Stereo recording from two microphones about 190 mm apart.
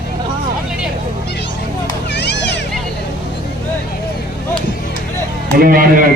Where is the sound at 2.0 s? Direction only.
65° left (ahead or behind).